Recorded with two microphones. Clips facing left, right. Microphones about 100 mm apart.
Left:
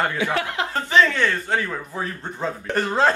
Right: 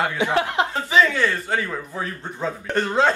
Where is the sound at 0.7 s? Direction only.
10° right (ahead or behind).